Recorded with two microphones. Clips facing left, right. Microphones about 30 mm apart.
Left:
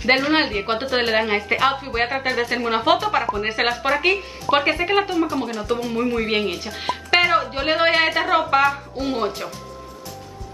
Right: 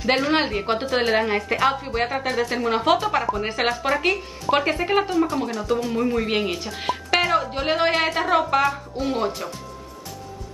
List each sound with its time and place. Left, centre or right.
0.0 s a woman's voice: centre
5.1 s speech: centre
5.6 s a woman's voice: left